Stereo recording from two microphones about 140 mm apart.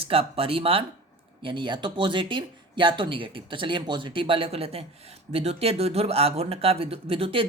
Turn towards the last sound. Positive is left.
turn(degrees=-40)  # may be behind; listen again after turning